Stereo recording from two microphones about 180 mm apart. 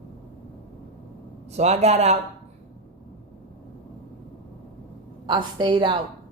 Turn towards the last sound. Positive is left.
turn(degrees=-25)  # may be behind; listen again after turning